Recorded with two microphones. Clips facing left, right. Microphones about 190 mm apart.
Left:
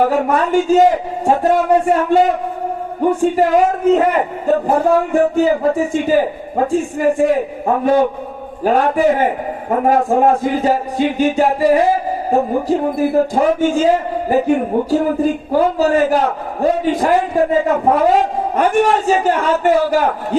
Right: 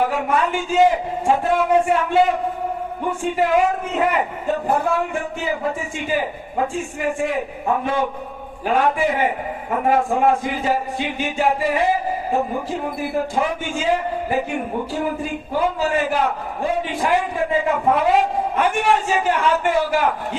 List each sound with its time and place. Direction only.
0.0 s a man's voice: 40° left (ahead or behind)
8.6 s a man's voice: 40° left (ahead or behind)